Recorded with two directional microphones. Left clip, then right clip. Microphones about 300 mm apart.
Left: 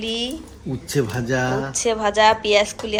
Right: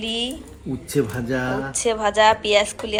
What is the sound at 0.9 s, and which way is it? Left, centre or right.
Speech, left.